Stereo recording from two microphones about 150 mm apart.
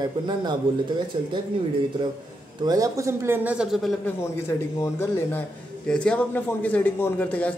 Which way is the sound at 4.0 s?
15° left (ahead or behind).